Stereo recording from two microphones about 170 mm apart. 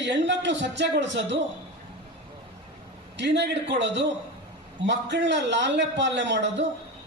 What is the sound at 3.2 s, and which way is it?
A man's voice, 90° right.